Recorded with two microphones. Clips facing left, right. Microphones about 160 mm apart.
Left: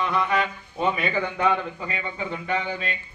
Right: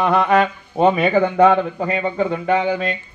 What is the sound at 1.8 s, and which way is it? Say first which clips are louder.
Speech: right 11 dB; 45° right (ahead or behind).